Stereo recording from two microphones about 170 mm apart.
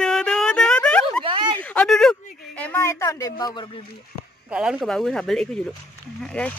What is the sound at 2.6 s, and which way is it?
Speech, 15° left (ahead or behind).